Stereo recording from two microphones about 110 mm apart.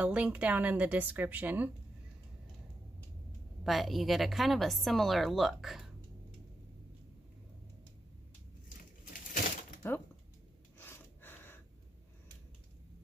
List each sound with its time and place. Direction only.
0.0 s speech: 10° right (ahead or behind)
3.6 s a woman's voice: centre (ahead or behind)
9.8 s speech: 20° left (ahead or behind)
10.8 s gasp: 20° left (ahead or behind)